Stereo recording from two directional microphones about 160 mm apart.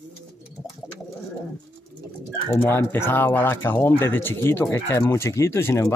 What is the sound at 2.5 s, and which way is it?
Speech, 15° left (ahead or behind).